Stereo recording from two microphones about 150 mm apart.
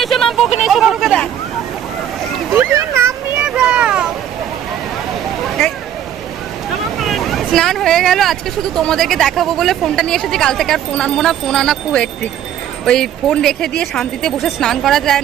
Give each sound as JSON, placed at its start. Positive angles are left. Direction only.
{"t": 0.0, "sound": "speech", "side_deg": 0}
{"t": 2.5, "sound": "a sound", "side_deg": -15}
{"t": 3.4, "sound": "vehicle", "side_deg": -5}
{"t": 6.7, "sound": "speech", "side_deg": 0}